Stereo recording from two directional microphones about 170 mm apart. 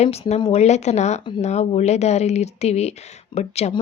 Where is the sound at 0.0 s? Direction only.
40° left (ahead or behind).